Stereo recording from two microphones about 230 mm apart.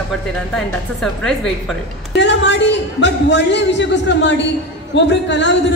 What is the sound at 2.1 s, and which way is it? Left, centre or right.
A man's voice, left.